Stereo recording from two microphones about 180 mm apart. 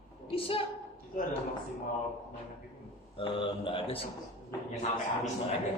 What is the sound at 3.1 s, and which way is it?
Speech, 30° left (ahead or behind).